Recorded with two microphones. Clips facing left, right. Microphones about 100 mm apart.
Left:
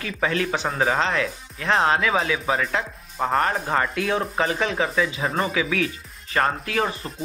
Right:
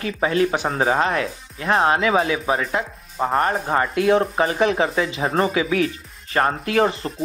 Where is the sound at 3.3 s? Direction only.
30° right (ahead or behind).